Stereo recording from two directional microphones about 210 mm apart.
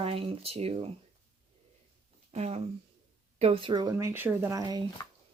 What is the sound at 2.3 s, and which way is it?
Speech, 30° right (ahead or behind).